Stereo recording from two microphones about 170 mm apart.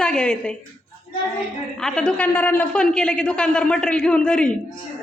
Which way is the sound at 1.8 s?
5° left (ahead or behind).